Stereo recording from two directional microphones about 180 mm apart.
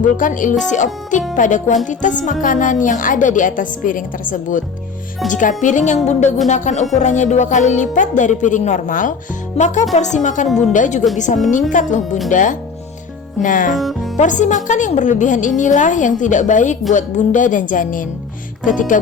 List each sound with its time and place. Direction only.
0.0 s speech: 45° left (ahead or behind)
13.7 s speech: centre (ahead or behind)
14.2 s speech: 45° left (ahead or behind)